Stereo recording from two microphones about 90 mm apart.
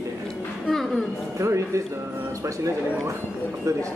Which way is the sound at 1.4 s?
35° right (ahead or behind).